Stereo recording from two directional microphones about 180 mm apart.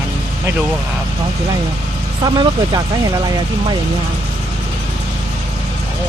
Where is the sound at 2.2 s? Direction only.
20° right (ahead or behind).